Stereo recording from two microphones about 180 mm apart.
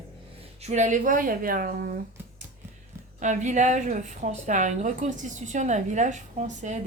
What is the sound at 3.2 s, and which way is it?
A woman's voice, 40° right (ahead or behind).